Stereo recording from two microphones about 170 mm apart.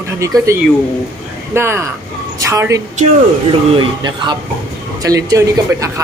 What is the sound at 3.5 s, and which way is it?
A woman's voice, 30° right (ahead or behind).